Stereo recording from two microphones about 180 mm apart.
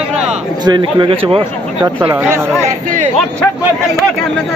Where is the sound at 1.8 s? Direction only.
15° right (ahead or behind).